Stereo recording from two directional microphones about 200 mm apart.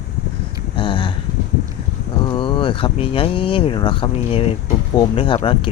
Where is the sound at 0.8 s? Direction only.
25° left (ahead or behind).